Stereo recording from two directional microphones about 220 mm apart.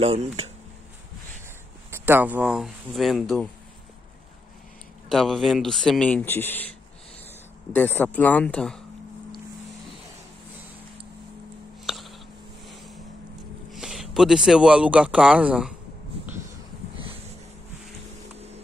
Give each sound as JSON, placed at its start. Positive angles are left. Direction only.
{"t": 0.0, "sound": "speech", "side_deg": -25}
{"t": 1.9, "sound": "speech", "side_deg": -10}
{"t": 5.1, "sound": "speech", "side_deg": 0}
{"t": 7.7, "sound": "speech", "side_deg": 10}
{"t": 11.8, "sound": "a sound", "side_deg": 0}
{"t": 12.6, "sound": "boat", "side_deg": 0}
{"t": 13.7, "sound": "speech", "side_deg": 0}